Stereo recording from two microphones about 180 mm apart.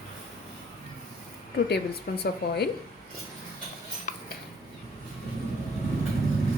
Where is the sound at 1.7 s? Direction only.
65° left (ahead or behind).